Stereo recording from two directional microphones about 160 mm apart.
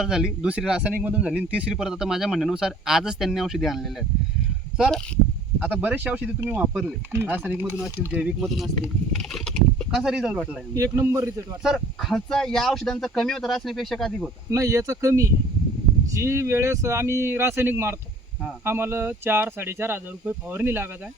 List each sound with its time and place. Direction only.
0.0 s speech: 5° right (ahead or behind)
5.5 s speech: 10° right (ahead or behind)
10.8 s speech: 15° right (ahead or behind)
11.6 s speech: centre (ahead or behind)
14.5 s speech: 20° right (ahead or behind)